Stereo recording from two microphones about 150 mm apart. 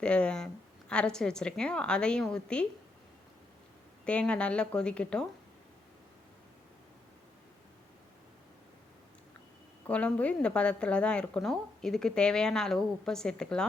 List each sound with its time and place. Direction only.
0.0 s a woman's voice: 5° left (ahead or behind)
4.0 s a woman's voice: 5° left (ahead or behind)
9.8 s a woman's voice: 10° left (ahead or behind)